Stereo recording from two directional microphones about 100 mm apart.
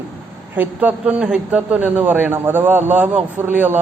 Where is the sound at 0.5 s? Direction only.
15° right (ahead or behind).